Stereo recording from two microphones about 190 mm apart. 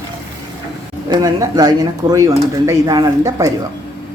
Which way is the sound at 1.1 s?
20° right (ahead or behind).